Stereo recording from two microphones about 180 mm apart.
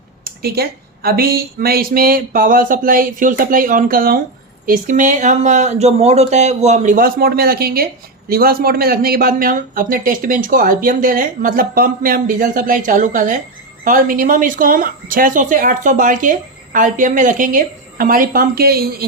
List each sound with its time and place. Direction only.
0.3 s speech: 60° right (ahead or behind)